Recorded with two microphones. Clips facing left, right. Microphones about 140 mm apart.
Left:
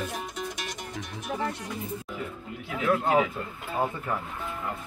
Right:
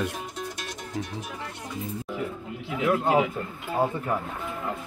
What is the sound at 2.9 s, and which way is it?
Speech, 15° right (ahead or behind).